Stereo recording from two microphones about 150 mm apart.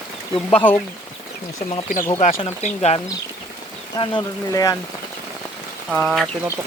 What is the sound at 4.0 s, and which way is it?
Speech, 30° left (ahead or behind).